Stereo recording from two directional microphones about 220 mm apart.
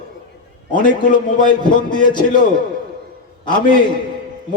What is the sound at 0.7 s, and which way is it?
Speech, 35° left (ahead or behind).